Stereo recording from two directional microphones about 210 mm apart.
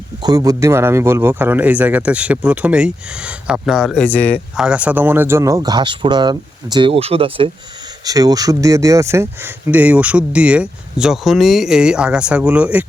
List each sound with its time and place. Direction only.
0.2 s a man's voice: 20° right (ahead or behind); by 4.0 s centre (ahead or behind)
4.0 s speech: 10° left (ahead or behind)
4.5 s speech: 5° right (ahead or behind)